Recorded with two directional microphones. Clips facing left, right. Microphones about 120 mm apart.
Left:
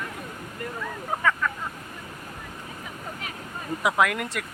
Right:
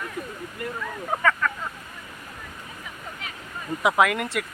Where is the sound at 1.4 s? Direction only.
5° left (ahead or behind).